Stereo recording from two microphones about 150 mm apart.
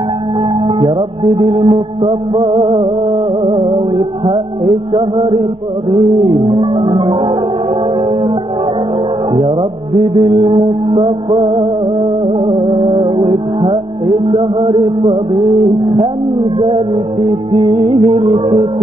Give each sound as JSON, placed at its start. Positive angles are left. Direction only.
{"t": 0.7, "sound": "music", "side_deg": -35}
{"t": 4.9, "sound": "music", "side_deg": -35}
{"t": 6.5, "sound": "music", "side_deg": -35}
{"t": 9.6, "sound": "music", "side_deg": -35}